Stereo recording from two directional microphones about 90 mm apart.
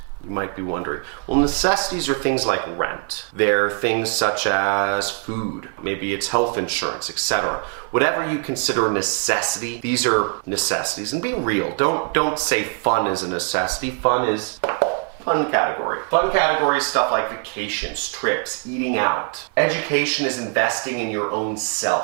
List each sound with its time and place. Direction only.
0.3 s speech: 20° right (ahead or behind)